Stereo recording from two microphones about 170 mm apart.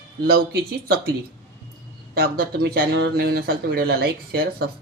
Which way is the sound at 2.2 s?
65° right (ahead or behind).